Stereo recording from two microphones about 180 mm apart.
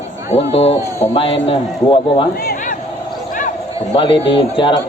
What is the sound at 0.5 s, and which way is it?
A man's voice, 35° left (ahead or behind).